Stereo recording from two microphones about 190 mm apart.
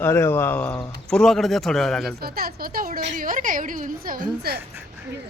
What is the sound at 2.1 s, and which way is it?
A woman's voice, 55° right (ahead or behind).